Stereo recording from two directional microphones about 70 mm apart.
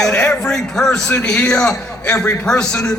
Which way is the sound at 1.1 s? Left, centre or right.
Left.